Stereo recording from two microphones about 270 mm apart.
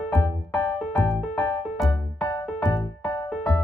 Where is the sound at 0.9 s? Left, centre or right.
Centre.